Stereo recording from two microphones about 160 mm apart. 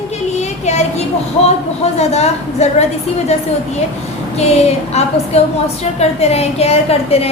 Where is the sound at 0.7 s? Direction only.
45° left (ahead or behind).